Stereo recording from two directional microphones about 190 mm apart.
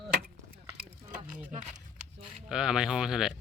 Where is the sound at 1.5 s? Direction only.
40° right (ahead or behind).